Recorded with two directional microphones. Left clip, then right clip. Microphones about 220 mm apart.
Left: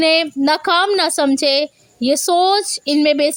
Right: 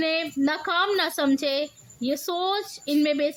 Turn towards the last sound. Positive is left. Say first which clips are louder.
# left 9 dB
turn(degrees=30)  # may be behind; listen again after turning